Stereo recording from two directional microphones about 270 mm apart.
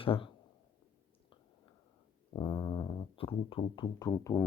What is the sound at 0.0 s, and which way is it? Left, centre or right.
Speech, centre.